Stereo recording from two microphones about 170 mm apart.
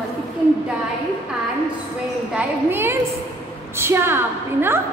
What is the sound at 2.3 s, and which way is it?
A woman's voice, 15° right (ahead or behind).